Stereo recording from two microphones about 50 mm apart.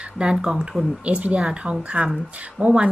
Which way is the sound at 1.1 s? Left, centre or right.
Right.